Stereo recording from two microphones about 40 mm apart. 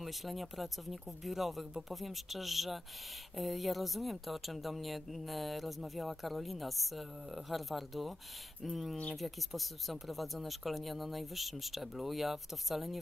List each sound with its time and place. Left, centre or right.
0.0 s speech: centre